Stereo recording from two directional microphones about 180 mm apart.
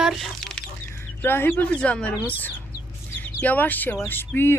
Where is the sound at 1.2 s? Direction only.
10° left (ahead or behind).